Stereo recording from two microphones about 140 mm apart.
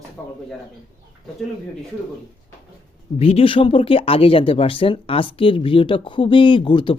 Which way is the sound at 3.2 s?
45° left (ahead or behind).